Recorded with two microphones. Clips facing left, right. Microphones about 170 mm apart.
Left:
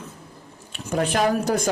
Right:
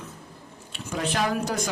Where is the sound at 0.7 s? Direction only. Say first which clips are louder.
Left 5 dB; 45° left (ahead or behind).